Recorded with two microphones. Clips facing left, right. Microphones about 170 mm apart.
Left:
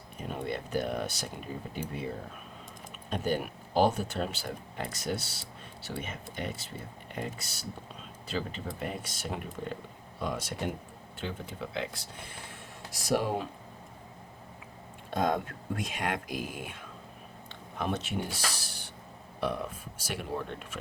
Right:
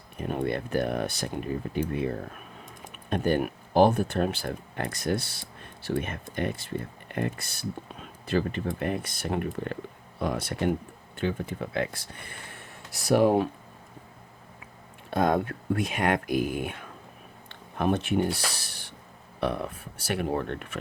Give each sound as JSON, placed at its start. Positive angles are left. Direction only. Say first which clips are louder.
{"t": 0.2, "sound": "speech", "louder": "right 6 dB", "side_deg": -55}
{"t": 15.1, "sound": "speech", "louder": "right 5 dB", "side_deg": -60}
{"t": 20.0, "sound": "speech", "louder": "right 7 dB", "side_deg": -60}